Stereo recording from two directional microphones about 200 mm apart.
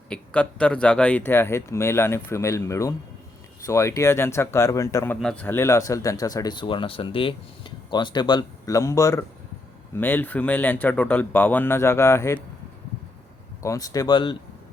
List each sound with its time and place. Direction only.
0.1 s speech: 5° left (ahead or behind)
13.6 s speech: 15° left (ahead or behind)